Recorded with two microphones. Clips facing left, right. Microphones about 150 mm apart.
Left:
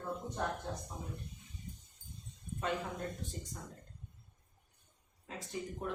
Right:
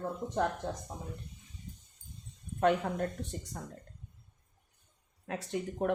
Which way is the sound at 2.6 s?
60° right (ahead or behind).